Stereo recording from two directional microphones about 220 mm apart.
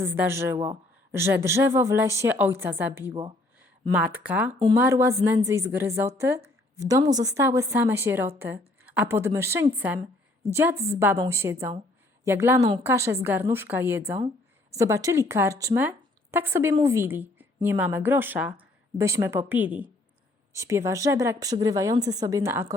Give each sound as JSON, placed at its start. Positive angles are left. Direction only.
{"t": 0.0, "sound": "speech", "side_deg": -10}
{"t": 8.4, "sound": "a sound", "side_deg": -10}
{"t": 9.1, "sound": "speech", "side_deg": -10}